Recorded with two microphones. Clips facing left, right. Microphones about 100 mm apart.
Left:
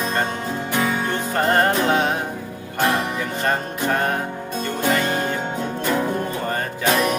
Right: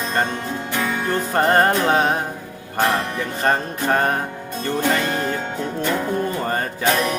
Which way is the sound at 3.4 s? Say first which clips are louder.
Right 3 dB; 35° right (ahead or behind).